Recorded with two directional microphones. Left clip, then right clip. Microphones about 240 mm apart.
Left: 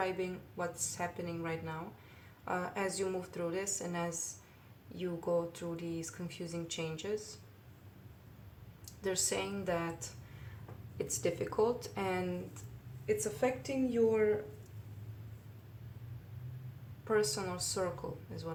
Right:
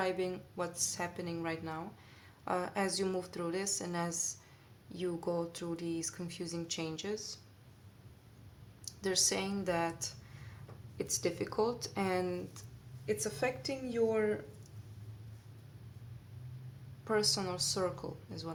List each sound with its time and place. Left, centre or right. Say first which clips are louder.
0.0 s speech: right 1 dB; right
9.0 s speech: right 2 dB; right
17.1 s speech: even; right